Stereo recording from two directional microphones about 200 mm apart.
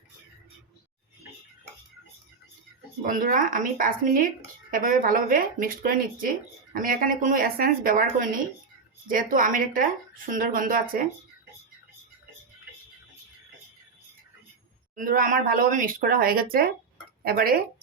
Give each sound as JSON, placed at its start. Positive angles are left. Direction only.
{"t": 3.0, "sound": "speech", "side_deg": -40}
{"t": 14.9, "sound": "speech", "side_deg": -40}